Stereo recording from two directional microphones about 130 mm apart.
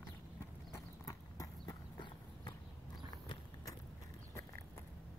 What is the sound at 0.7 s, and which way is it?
Clip-clop, 25° left (ahead or behind).